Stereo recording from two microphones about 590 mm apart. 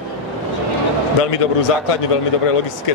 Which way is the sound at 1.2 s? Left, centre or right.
Left.